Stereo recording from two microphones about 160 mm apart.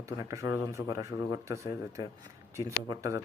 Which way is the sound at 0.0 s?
20° right (ahead or behind).